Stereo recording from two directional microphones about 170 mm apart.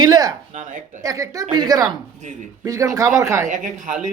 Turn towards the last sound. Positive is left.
turn(degrees=-50)  # may be behind; listen again after turning